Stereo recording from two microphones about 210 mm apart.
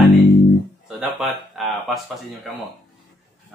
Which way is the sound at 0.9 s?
Centre (ahead or behind).